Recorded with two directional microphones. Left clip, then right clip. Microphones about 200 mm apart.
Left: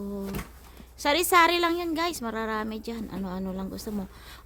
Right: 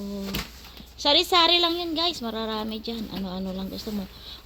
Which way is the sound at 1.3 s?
55° left (ahead or behind).